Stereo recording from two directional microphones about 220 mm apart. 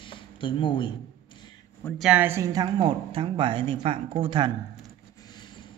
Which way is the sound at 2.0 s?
5° right (ahead or behind).